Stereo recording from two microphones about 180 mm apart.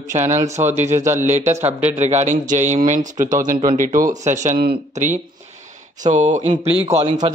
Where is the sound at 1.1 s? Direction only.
15° right (ahead or behind).